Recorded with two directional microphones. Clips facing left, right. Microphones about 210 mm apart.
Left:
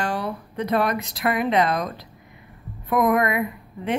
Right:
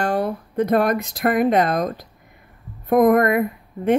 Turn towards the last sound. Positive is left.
turn(degrees=-50)  # may be behind; listen again after turning